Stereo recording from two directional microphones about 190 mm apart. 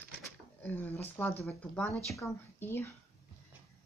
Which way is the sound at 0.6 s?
10° left (ahead or behind).